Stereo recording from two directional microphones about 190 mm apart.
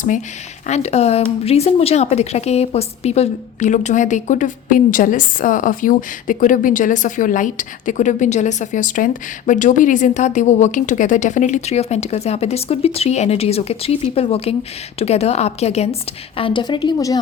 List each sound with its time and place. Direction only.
0.7 s a woman's voice: 35° left (ahead or behind)